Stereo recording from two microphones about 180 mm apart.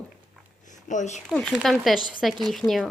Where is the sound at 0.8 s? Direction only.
40° left (ahead or behind).